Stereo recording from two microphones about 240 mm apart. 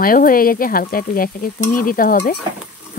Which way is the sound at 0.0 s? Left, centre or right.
Left.